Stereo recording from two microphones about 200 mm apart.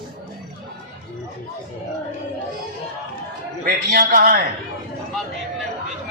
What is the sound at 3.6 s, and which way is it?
Speech, 45° right (ahead or behind).